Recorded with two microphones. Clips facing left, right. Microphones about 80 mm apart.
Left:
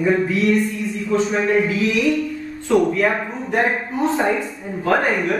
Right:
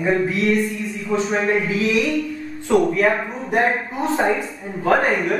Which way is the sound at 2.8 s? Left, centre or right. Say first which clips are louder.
Right 1 dB; centre.